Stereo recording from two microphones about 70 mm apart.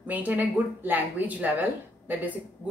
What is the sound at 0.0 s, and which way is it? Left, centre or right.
A woman's voice, right.